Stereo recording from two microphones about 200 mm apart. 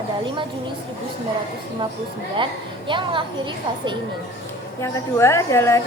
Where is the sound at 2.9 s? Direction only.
25° right (ahead or behind).